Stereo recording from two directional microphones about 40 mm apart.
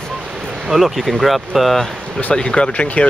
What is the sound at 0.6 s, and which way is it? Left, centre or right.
Speech, centre.